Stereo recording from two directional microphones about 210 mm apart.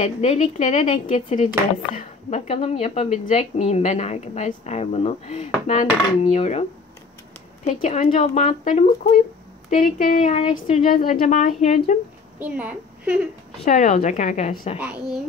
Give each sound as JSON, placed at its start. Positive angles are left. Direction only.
{"t": 0.0, "sound": "a woman's voice", "side_deg": 35}
{"t": 7.6, "sound": "a woman's voice", "side_deg": 35}
{"t": 9.8, "sound": "a woman's voice", "side_deg": 40}
{"t": 12.4, "sound": "a woman's voice", "side_deg": -5}
{"t": 13.7, "sound": "a woman's voice", "side_deg": 40}
{"t": 14.8, "sound": "speech", "side_deg": -5}